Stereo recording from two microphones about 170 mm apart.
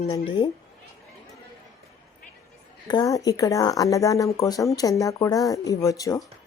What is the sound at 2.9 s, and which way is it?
Speech, 20° left (ahead or behind).